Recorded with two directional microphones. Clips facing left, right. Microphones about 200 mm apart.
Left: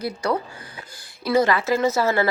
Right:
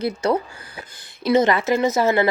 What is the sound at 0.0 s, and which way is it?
Speech, 25° right (ahead or behind).